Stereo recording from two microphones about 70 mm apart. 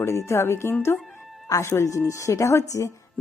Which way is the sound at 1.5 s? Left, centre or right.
Left.